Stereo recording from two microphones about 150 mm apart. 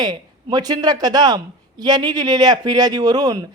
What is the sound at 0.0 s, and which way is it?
A man's voice, 25° right (ahead or behind).